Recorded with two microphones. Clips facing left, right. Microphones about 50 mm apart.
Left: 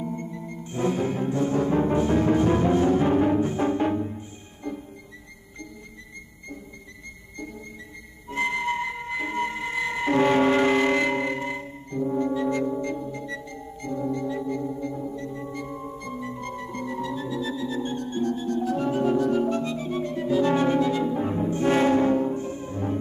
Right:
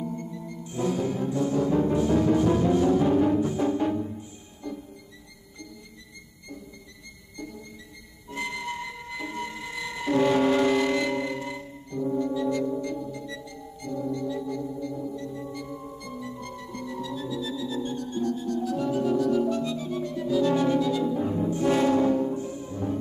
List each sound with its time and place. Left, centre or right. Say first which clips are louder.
0.0 s music: left 2 dB; left
8.3 s music: left 7 dB; left